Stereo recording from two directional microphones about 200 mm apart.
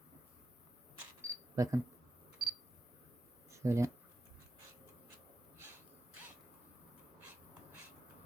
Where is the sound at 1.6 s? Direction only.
15° right (ahead or behind).